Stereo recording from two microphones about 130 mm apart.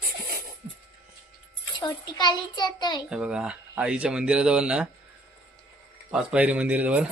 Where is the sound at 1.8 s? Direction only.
35° left (ahead or behind).